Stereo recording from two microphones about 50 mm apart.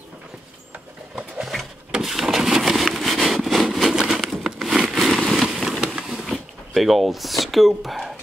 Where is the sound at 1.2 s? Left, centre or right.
Centre.